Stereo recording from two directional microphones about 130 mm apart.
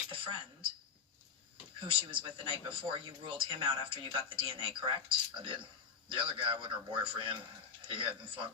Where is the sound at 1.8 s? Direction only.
40° right (ahead or behind).